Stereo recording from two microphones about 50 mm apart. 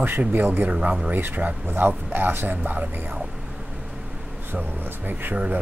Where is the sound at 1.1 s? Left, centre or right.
Right.